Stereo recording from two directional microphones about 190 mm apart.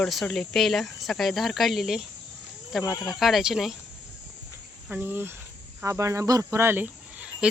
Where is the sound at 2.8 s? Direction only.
20° left (ahead or behind).